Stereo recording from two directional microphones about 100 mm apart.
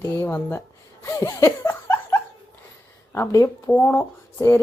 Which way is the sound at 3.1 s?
30° left (ahead or behind).